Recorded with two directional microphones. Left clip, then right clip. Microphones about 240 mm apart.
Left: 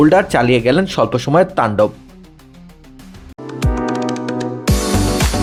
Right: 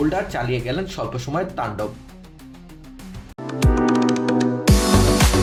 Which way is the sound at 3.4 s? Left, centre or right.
Centre.